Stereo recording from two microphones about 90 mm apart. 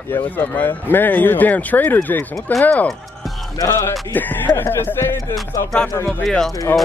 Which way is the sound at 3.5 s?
35° left (ahead or behind).